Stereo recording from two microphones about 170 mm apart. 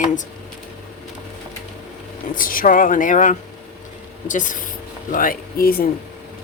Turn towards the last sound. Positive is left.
turn(degrees=60)  # may be behind; listen again after turning